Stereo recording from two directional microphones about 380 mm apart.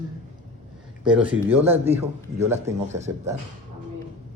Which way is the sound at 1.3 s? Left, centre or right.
Centre.